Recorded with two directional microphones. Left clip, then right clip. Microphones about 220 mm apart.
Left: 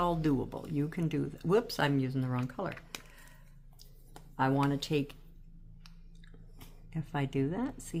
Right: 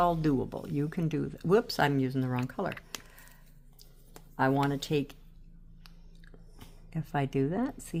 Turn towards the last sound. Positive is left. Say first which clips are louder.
# right 3 dB
turn(degrees=-25)  # may be behind; listen again after turning